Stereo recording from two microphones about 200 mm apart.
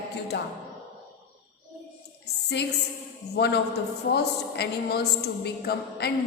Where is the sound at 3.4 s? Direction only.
55° left (ahead or behind).